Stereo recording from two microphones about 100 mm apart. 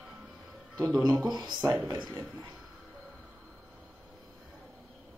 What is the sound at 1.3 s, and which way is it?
Speech, 45° right (ahead or behind).